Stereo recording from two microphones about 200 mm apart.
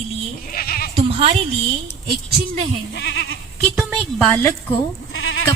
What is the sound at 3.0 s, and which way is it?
Speech, 55° left (ahead or behind).